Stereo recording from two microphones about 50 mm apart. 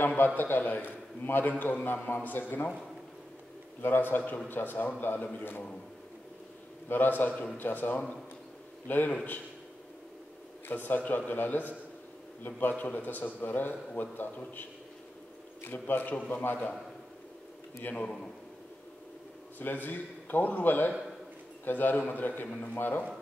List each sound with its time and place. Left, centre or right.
0.0 s a man's voice: left
3.8 s a man's voice: left
6.9 s a man's voice: left
10.7 s a man's voice: left
19.6 s a man's voice: left